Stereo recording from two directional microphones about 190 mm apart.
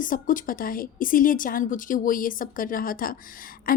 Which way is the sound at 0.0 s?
45° left (ahead or behind).